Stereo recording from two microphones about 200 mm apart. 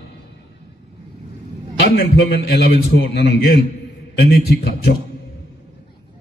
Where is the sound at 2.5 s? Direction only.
55° left (ahead or behind).